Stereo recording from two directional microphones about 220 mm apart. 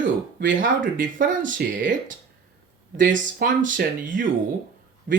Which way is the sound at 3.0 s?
35° right (ahead or behind).